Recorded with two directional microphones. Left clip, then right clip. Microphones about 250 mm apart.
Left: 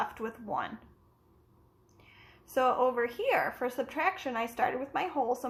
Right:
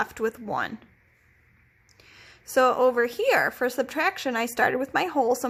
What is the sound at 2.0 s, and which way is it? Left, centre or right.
A woman's voice, right.